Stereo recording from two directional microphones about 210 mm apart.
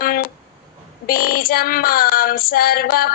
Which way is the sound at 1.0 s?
45° left (ahead or behind).